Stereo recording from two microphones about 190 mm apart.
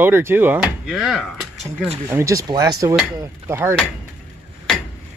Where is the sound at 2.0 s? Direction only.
15° right (ahead or behind).